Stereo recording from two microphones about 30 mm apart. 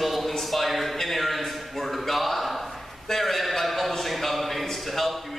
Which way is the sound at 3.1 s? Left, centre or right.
Centre.